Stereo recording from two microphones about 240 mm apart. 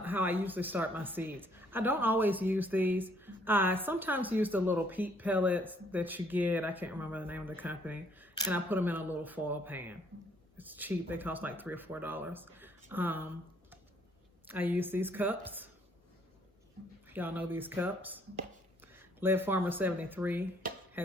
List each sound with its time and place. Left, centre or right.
0.0 s a woman's voice: centre
17.1 s a woman's voice: centre
19.2 s a woman's voice: centre
20.6 s a sound: right